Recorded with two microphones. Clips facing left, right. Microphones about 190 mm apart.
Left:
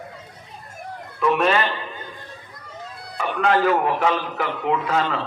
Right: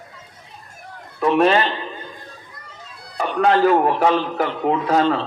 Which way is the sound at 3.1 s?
35° right (ahead or behind).